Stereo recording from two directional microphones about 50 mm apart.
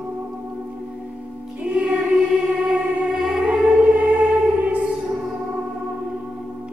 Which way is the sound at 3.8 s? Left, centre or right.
Right.